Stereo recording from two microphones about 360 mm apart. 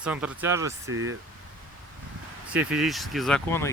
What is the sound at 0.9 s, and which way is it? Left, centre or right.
Speech, right.